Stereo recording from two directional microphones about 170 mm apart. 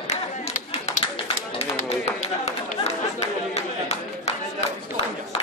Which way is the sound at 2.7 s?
40° left (ahead or behind).